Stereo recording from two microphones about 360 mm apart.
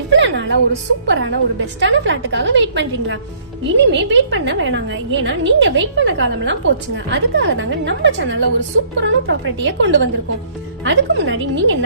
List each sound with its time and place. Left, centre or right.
0.1 s music: right
1.0 s a woman's voice: right